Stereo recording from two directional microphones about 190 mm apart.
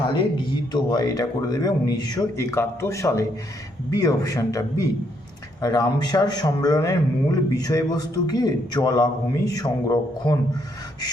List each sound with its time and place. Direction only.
0.1 s a man's voice: 25° left (ahead or behind)